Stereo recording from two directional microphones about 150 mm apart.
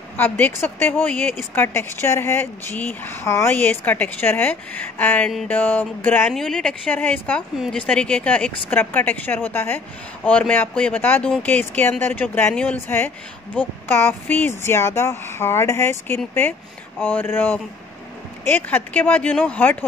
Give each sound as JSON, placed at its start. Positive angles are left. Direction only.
{"t": 0.2, "sound": "speech", "side_deg": 15}
{"t": 7.5, "sound": "speech", "side_deg": -5}
{"t": 7.8, "sound": "speech", "side_deg": 10}